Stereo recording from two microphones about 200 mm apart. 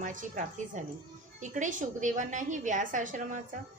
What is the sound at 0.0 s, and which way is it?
A woman's voice, 40° right (ahead or behind).